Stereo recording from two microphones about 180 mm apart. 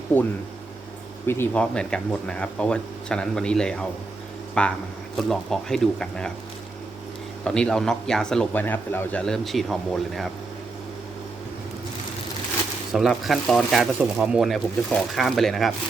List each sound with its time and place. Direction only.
1.3 s speech: 10° left (ahead or behind)
7.4 s speech: 5° left (ahead or behind)
12.9 s speech: centre (ahead or behind)